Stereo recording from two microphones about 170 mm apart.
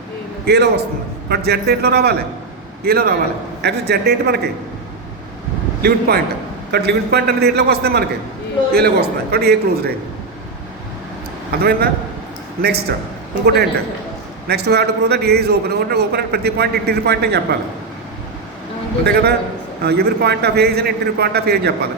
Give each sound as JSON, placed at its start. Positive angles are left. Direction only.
{"t": 0.4, "sound": "a man's voice", "side_deg": -75}
{"t": 5.8, "sound": "a man's voice", "side_deg": -65}
{"t": 11.5, "sound": "a man's voice", "side_deg": -65}
{"t": 13.4, "sound": "a man's voice", "side_deg": -70}
{"t": 19.0, "sound": "a man's voice", "side_deg": -65}